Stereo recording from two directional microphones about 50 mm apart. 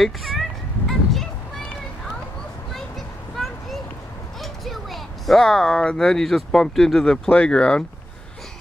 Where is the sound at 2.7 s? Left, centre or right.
Centre.